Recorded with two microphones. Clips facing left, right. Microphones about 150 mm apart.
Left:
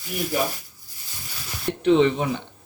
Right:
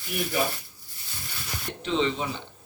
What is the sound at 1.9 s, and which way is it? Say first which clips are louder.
Speech: left 8 dB; 60° left (ahead or behind).